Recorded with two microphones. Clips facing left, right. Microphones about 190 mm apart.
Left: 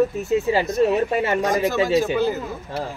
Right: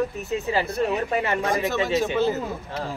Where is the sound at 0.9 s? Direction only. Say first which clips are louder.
Left 4 dB; 35° left (ahead or behind).